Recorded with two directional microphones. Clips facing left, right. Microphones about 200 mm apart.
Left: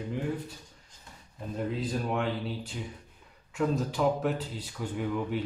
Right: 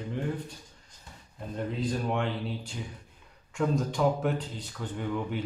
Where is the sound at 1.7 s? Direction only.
5° left (ahead or behind).